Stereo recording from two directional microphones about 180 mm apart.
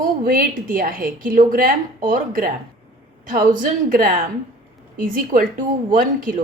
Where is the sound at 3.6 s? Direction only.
50° right (ahead or behind).